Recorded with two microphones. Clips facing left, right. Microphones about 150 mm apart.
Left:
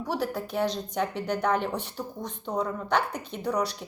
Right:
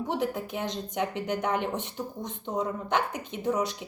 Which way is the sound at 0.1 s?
20° right (ahead or behind).